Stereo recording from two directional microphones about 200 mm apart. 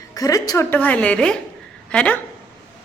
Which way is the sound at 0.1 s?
15° left (ahead or behind).